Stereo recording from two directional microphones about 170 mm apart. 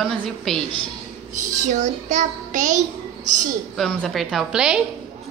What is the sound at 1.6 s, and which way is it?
A child's voice, 45° right (ahead or behind).